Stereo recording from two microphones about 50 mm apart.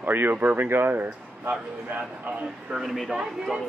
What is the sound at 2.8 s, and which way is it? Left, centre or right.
Speech, centre.